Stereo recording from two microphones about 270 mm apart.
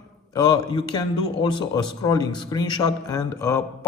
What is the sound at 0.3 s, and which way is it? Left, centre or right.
A man's voice, centre.